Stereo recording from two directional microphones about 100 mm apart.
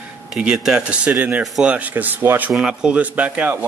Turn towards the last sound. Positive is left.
turn(degrees=-15)  # may be behind; listen again after turning